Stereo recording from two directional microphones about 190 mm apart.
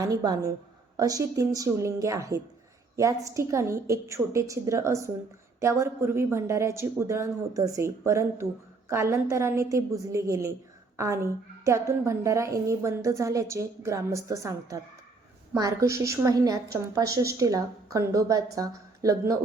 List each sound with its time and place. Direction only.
0.0 s a woman's voice: 20° right (ahead or behind)